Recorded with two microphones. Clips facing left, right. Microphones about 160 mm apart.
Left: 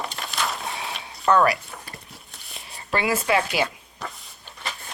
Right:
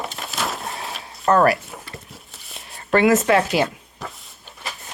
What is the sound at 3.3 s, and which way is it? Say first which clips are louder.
Speech: even; 5° left (ahead or behind).